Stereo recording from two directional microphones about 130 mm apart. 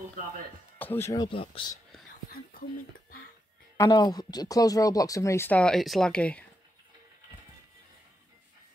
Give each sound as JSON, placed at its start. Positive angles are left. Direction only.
{"t": 0.7, "sound": "speech", "side_deg": 15}
{"t": 1.1, "sound": "speech", "side_deg": 40}
{"t": 3.7, "sound": "speech", "side_deg": 30}